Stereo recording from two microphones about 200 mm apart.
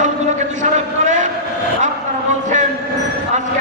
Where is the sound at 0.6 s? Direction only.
35° right (ahead or behind).